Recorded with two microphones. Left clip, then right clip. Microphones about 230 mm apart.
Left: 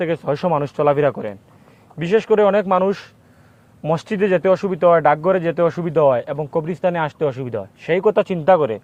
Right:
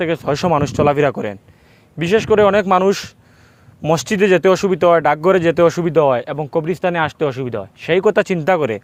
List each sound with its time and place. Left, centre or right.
0.0 s speech: right
2.0 s speech: right